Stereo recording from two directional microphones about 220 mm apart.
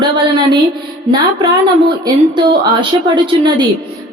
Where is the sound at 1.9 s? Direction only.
20° right (ahead or behind).